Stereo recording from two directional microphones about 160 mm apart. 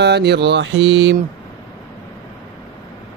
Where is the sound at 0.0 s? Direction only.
90° right.